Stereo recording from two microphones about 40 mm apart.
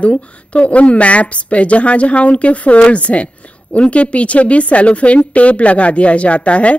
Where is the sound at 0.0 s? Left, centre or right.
Left.